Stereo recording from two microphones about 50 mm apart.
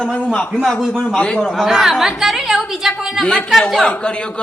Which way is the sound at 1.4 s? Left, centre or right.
Centre.